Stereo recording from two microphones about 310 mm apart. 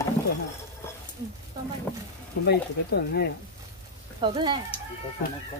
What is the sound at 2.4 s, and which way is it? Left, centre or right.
Speech, left.